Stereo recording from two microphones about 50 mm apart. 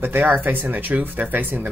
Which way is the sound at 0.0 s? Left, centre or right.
Right.